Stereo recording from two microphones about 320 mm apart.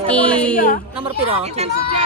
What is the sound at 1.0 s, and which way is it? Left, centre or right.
Speech, centre.